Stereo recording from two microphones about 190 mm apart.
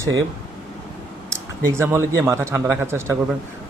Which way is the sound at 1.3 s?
15° right (ahead or behind).